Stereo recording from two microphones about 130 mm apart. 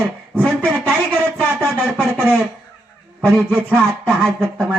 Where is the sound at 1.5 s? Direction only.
5° right (ahead or behind).